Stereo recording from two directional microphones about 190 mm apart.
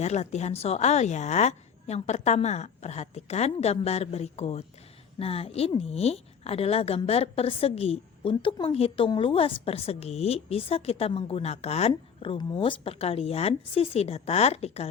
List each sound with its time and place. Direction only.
0.0 s a woman's voice: 35° left (ahead or behind)